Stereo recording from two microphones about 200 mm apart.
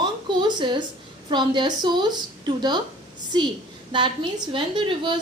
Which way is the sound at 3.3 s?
20° right (ahead or behind).